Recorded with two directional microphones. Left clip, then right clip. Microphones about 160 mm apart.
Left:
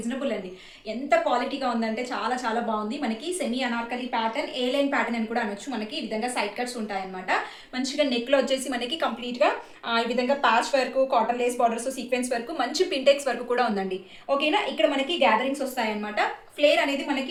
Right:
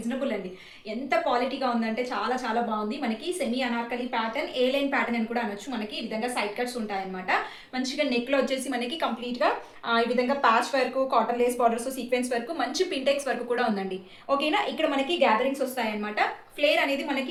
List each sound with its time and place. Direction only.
1.2 s a woman's voice: 30° left (ahead or behind)